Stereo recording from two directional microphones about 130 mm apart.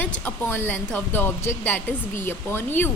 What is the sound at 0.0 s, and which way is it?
A woman's voice, 15° left (ahead or behind).